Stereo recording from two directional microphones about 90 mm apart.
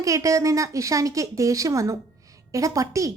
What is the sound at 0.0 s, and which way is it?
A woman's voice, 40° right (ahead or behind).